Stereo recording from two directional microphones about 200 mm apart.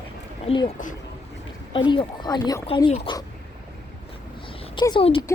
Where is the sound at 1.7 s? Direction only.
25° left (ahead or behind).